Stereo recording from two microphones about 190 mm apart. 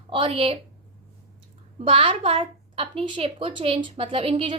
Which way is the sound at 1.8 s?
30° right (ahead or behind).